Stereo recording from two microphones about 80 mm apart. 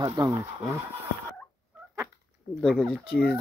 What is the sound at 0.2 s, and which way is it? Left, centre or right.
Speech, right.